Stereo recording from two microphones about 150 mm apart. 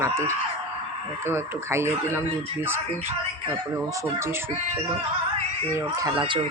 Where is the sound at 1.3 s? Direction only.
15° right (ahead or behind).